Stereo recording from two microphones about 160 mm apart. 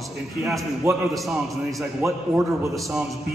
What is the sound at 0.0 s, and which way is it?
A man's voice, centre (ahead or behind).